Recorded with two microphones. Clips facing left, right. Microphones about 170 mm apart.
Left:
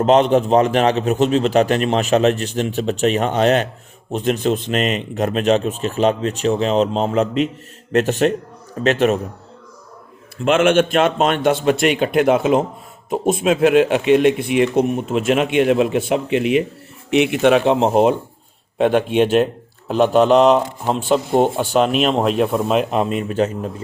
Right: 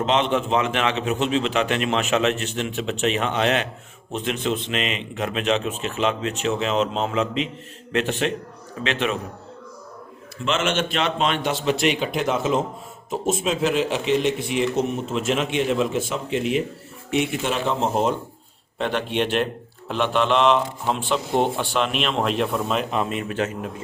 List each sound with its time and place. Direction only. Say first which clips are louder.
0.0 s a man's voice: left 8 dB; 40° left (ahead or behind)
10.4 s a man's voice: left 9 dB; 55° left (ahead or behind)
18.8 s a man's voice: left 8 dB; 50° left (ahead or behind)